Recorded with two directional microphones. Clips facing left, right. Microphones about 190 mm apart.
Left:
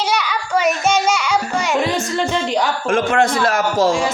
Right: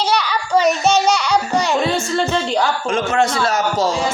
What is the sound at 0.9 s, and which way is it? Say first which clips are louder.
Music: right 2 dB; 10° left (ahead or behind).